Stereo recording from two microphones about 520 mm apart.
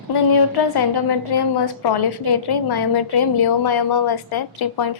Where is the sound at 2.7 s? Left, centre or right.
Left.